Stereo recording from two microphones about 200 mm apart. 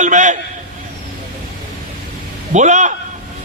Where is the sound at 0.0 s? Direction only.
35° right (ahead or behind).